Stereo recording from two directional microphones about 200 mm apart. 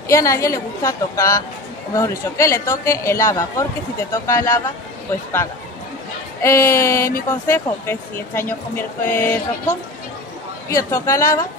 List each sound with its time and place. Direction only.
0.1 s speech: 15° left (ahead or behind)
6.4 s speech: 15° left (ahead or behind)